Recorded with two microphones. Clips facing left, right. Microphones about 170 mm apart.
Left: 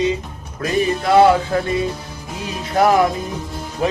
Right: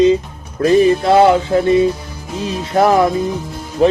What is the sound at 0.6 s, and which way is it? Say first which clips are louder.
Music: right 7 dB; 30° right (ahead or behind).